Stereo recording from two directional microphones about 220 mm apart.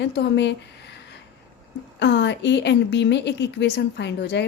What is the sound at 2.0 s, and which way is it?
A woman's voice, 55° left (ahead or behind).